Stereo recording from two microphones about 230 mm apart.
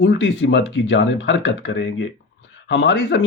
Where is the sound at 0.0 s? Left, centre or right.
Left.